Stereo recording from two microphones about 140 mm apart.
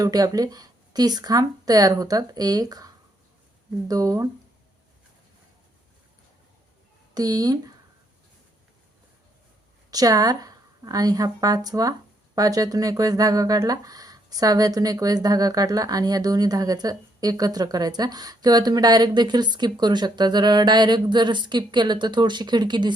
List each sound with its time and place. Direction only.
0.0 s a woman's voice: 25° right (ahead or behind)
7.1 s a woman's voice: 25° right (ahead or behind)
9.9 s a woman's voice: 25° right (ahead or behind)